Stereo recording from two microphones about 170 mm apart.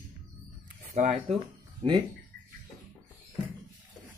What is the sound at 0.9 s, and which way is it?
Speech, 35° right (ahead or behind).